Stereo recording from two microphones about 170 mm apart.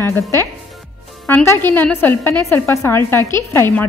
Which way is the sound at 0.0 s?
15° left (ahead or behind).